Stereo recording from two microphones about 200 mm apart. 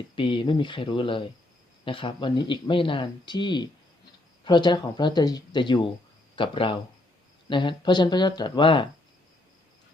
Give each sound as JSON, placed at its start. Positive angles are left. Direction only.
{"t": 0.2, "sound": "speech", "side_deg": 25}